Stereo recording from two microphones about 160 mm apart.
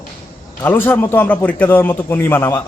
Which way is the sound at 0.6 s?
15° left (ahead or behind).